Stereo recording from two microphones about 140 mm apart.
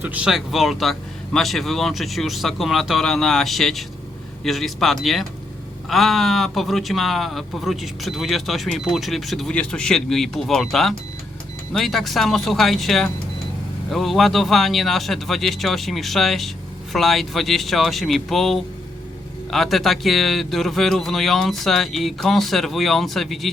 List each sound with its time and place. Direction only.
0.0 s speech: 10° right (ahead or behind)